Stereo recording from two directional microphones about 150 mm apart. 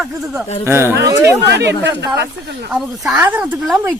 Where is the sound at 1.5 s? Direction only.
90° right.